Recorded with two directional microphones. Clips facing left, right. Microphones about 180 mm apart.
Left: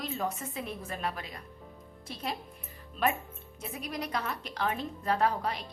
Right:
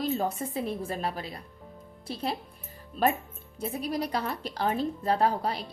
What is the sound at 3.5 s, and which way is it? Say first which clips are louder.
Speech: right 7 dB; 30° right (ahead or behind).